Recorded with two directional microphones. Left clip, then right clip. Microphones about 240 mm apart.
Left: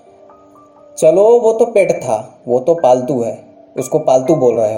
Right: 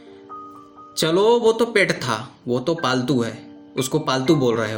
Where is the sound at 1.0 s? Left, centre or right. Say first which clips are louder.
Left 8 dB; right.